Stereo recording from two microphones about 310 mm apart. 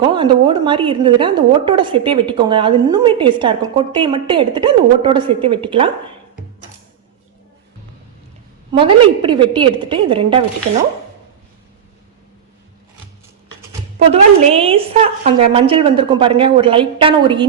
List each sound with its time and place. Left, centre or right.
0.0 s a woman's voice: centre
8.7 s a woman's voice: centre
14.0 s a woman's voice: centre